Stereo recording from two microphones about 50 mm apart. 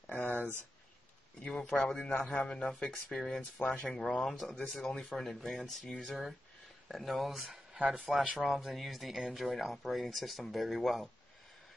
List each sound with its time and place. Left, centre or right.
0.1 s a sound: centre
1.4 s speech: centre
2.7 s speech: centre
6.0 s speech: centre
7.7 s speech: centre
8.1 s speech: centre